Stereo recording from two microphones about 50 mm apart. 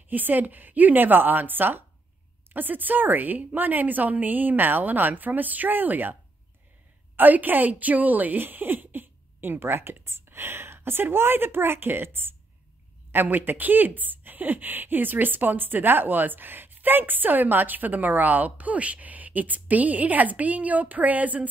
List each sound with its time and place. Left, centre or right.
0.1 s speech: right
7.2 s speech: right